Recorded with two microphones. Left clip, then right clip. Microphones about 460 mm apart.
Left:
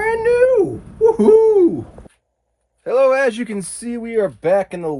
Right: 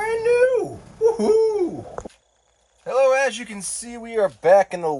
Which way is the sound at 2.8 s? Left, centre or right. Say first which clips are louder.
Left 4 dB; centre.